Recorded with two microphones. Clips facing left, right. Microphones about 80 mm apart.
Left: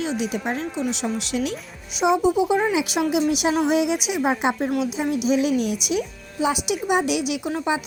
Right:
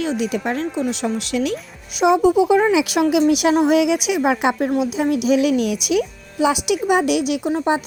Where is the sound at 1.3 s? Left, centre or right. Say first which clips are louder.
Right 4 dB; right.